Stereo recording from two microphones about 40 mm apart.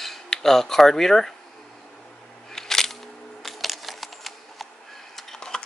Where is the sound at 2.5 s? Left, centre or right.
Centre.